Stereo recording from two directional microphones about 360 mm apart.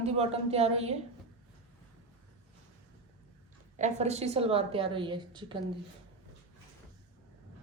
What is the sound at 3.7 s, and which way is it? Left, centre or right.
A woman's voice, centre.